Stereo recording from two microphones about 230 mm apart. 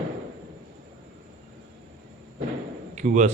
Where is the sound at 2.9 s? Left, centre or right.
Right.